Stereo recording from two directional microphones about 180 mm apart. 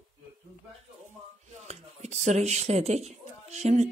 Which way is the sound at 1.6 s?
40° right (ahead or behind).